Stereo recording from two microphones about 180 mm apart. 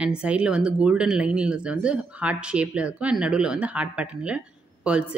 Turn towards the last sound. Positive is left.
turn(degrees=-5)  # may be behind; listen again after turning